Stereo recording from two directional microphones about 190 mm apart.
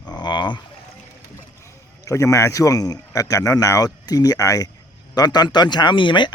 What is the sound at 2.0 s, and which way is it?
A man's voice, 15° left (ahead or behind).